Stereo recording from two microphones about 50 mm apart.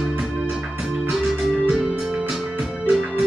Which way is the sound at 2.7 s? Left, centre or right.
Centre.